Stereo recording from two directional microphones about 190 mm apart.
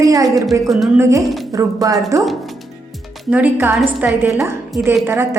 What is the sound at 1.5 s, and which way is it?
Speech, 20° right (ahead or behind).